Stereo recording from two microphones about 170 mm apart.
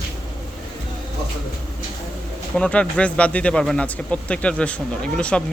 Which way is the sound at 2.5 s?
5° left (ahead or behind).